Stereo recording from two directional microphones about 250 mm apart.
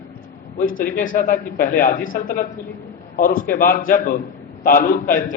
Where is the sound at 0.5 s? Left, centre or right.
Left.